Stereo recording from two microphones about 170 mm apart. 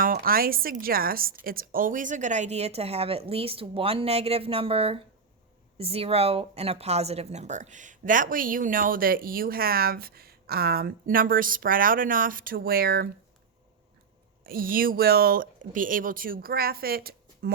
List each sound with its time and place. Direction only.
0.0 s a woman's voice: 60° right (ahead or behind)
14.4 s speech: 60° right (ahead or behind)